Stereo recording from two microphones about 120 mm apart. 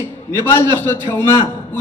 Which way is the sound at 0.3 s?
20° left (ahead or behind).